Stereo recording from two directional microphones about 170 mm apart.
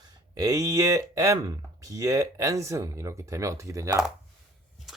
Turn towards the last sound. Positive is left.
turn(degrees=-20)  # may be behind; listen again after turning